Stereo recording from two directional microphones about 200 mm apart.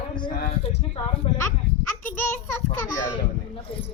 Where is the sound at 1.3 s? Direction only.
25° left (ahead or behind).